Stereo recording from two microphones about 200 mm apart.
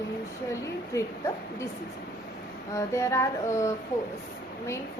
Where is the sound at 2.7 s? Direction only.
15° left (ahead or behind).